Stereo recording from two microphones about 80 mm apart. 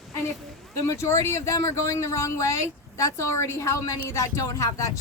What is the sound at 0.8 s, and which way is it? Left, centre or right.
Speech, left.